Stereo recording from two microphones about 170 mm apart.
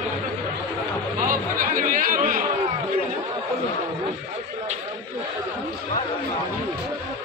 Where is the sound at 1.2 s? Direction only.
55° right (ahead or behind).